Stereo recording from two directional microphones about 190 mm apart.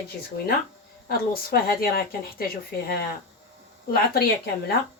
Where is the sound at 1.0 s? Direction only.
55° left (ahead or behind).